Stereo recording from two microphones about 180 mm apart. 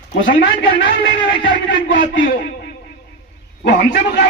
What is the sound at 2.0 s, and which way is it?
Speech, 50° left (ahead or behind).